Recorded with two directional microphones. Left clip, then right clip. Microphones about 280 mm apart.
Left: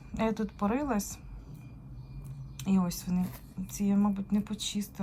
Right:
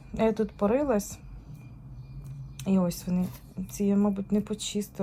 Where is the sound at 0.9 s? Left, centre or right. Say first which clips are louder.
Right 6 dB; left.